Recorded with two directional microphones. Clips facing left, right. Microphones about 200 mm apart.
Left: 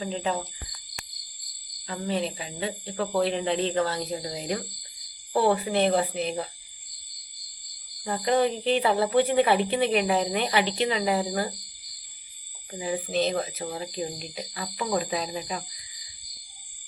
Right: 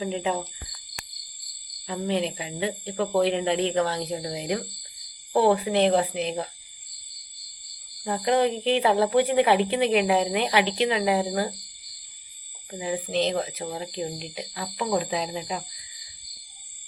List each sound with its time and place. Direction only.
0.0 s speech: 15° right (ahead or behind)
1.9 s speech: 15° right (ahead or behind)
8.0 s speech: 10° right (ahead or behind)
12.7 s speech: 15° right (ahead or behind)
13.7 s speech: 5° right (ahead or behind)